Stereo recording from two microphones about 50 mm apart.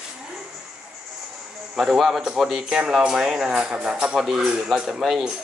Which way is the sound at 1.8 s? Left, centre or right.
Centre.